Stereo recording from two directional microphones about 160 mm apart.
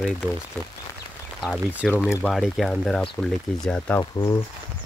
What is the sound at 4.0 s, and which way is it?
Speech, 25° left (ahead or behind).